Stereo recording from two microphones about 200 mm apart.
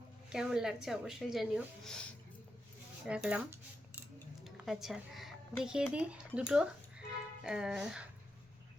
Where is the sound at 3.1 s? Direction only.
5° right (ahead or behind).